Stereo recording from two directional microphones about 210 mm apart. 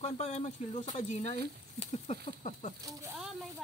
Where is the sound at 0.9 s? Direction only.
35° left (ahead or behind).